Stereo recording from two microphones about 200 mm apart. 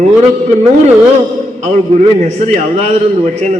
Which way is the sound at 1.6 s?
35° right (ahead or behind).